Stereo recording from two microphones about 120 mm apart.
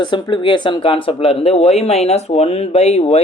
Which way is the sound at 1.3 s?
60° left (ahead or behind).